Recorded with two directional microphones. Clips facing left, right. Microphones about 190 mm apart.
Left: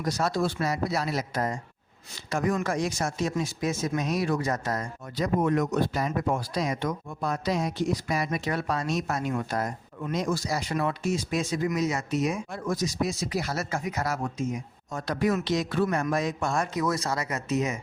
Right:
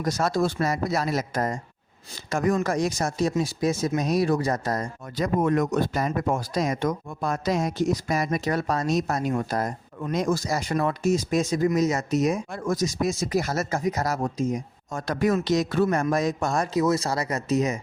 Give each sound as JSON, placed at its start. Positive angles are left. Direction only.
{"t": 0.0, "sound": "speech", "side_deg": -45}
{"t": 5.2, "sound": "speech", "side_deg": -50}
{"t": 16.7, "sound": "speech", "side_deg": -25}